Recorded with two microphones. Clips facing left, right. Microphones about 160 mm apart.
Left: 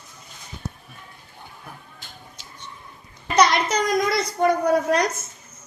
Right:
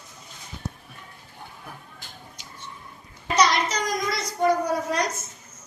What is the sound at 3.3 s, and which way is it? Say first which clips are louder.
A child's voice: left 3 dB; 55° left (ahead or behind).